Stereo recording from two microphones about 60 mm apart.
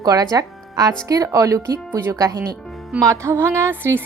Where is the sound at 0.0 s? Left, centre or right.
Right.